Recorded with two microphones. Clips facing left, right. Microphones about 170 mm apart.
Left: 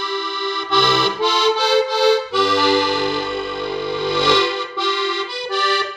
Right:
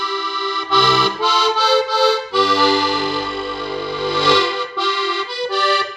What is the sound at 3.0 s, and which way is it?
Music, 20° left (ahead or behind).